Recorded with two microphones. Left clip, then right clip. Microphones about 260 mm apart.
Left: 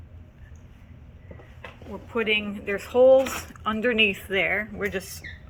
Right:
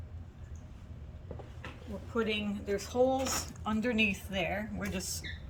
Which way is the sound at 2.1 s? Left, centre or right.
Centre.